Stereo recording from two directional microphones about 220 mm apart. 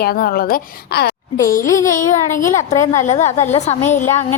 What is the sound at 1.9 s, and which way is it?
A woman's voice, 35° left (ahead or behind).